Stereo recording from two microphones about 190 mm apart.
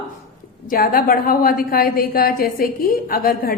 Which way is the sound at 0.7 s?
50° left (ahead or behind).